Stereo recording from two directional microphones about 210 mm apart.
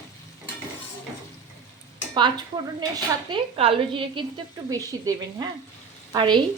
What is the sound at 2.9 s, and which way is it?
Speech, 25° right (ahead or behind).